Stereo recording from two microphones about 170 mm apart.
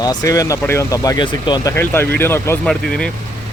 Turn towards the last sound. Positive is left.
turn(degrees=5)  # may be behind; listen again after turning